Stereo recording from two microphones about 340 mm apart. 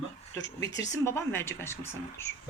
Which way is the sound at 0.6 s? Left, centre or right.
Centre.